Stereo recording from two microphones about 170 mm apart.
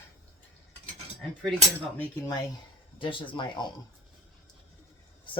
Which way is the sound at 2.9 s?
30° left (ahead or behind).